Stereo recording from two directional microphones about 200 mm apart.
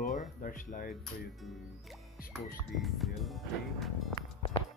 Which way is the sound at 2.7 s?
Centre (ahead or behind).